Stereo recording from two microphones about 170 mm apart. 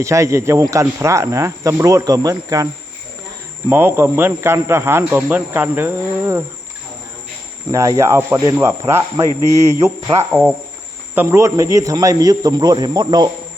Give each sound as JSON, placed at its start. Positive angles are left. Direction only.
{"t": 0.0, "sound": "speech", "side_deg": -15}
{"t": 3.7, "sound": "speech", "side_deg": -10}
{"t": 7.7, "sound": "a man's voice", "side_deg": -20}